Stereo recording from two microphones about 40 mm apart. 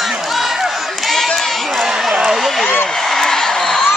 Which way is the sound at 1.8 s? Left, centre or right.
Centre.